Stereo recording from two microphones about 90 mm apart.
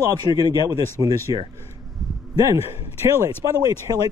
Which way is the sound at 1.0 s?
40° right (ahead or behind).